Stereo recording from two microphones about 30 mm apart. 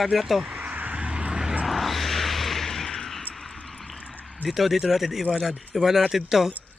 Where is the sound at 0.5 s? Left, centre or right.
Right.